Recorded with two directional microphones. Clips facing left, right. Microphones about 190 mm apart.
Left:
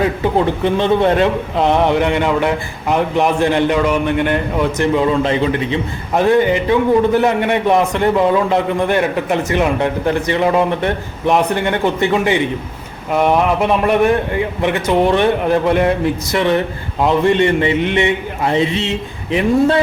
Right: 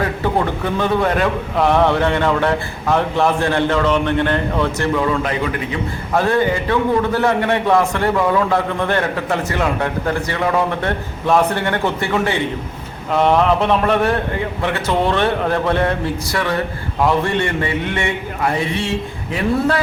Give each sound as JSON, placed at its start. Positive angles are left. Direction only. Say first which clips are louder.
{"t": 0.0, "sound": "a man's voice", "louder": "left 4 dB", "side_deg": 20}